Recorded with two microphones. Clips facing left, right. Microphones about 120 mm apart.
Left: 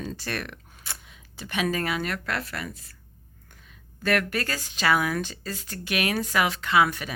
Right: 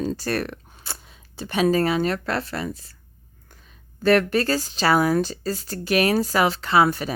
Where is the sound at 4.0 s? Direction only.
30° right (ahead or behind).